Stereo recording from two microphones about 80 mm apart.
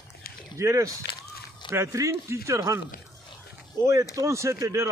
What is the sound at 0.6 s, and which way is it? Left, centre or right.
Speech, right.